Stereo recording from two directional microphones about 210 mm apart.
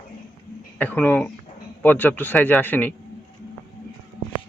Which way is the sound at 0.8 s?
10° left (ahead or behind).